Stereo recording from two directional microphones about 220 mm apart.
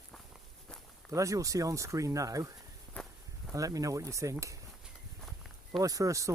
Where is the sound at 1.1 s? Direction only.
15° right (ahead or behind).